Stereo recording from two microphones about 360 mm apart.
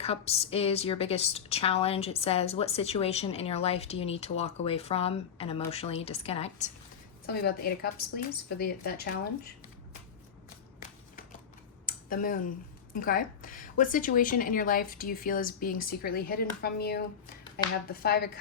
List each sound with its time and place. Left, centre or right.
0.0 s a woman's voice: centre
11.9 s a sound: left
12.9 s speech: left
18.0 s speech: left